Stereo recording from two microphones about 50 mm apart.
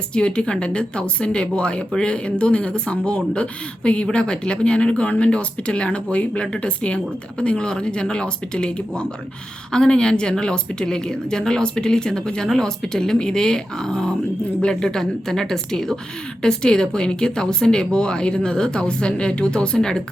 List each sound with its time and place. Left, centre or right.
0.1 s speech: centre